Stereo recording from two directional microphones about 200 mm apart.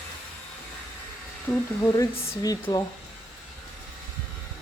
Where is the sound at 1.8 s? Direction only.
10° left (ahead or behind).